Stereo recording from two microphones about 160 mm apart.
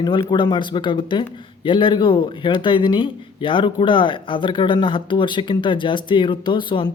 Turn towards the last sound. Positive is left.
turn(degrees=30)  # may be behind; listen again after turning